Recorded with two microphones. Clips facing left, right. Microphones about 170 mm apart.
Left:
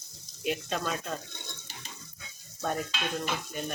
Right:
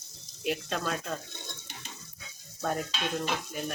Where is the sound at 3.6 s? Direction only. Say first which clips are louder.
Even; 5° right (ahead or behind).